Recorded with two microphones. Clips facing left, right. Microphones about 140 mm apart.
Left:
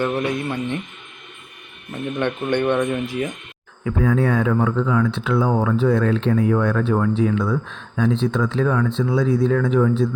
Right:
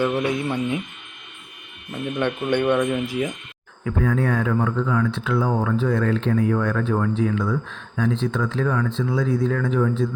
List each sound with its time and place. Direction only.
0.0 s speech: 5° right (ahead or behind)
1.9 s speech: 10° right (ahead or behind)
4.1 s speech: 90° left